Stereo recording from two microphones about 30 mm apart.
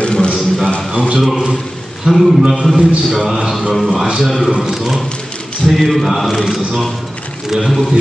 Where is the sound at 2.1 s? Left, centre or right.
Right.